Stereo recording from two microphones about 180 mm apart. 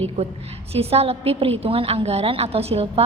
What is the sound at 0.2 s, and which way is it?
A woman's voice, 35° right (ahead or behind).